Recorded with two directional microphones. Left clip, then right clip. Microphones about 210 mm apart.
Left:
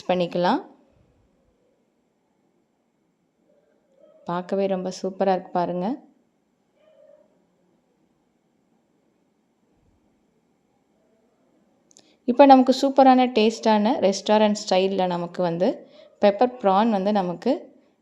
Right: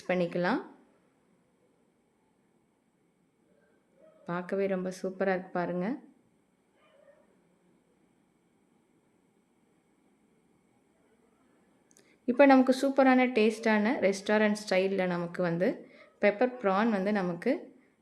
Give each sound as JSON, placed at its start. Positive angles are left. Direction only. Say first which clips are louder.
{"t": 0.0, "sound": "a woman's voice", "louder": "left 8 dB", "side_deg": 25}
{"t": 4.2, "sound": "a woman's voice", "louder": "left 7 dB", "side_deg": 25}
{"t": 11.9, "sound": "a woman's voice", "louder": "left 7 dB", "side_deg": 20}